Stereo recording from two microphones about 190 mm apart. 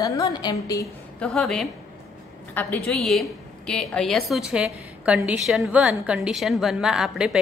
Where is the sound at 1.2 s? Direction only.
Centre (ahead or behind).